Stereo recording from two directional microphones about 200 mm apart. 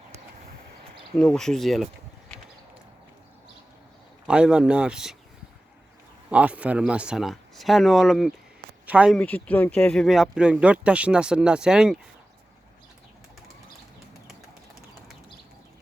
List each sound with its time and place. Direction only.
1.1 s speech: 5° left (ahead or behind)
4.3 s speech: 5° right (ahead or behind)
6.3 s speech: 5° right (ahead or behind)
9.1 s speech: 10° left (ahead or behind)